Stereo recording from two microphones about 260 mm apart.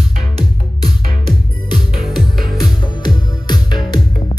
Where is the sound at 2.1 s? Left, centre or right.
Centre.